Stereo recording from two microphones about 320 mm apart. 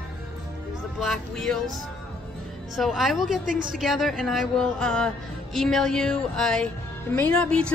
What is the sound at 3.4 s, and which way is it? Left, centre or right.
Speech, right.